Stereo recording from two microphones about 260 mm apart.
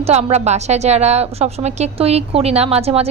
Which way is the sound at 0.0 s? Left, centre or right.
Right.